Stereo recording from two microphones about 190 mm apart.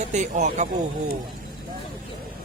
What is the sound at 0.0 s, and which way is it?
Speech, 40° right (ahead or behind).